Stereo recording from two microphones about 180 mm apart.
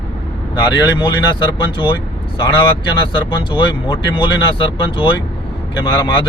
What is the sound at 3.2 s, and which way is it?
Speech, 25° left (ahead or behind).